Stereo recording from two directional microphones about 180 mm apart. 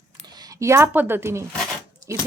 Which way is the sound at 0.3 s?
20° right (ahead or behind).